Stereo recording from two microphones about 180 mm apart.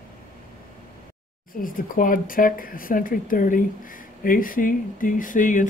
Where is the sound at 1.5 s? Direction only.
50° left (ahead or behind).